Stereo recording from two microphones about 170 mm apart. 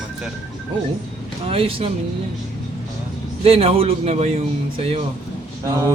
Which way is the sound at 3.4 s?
35° right (ahead or behind).